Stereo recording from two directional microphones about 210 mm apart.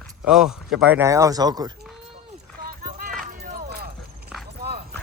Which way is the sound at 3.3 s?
40° right (ahead or behind).